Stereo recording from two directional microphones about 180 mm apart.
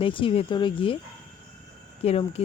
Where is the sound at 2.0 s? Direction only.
35° left (ahead or behind).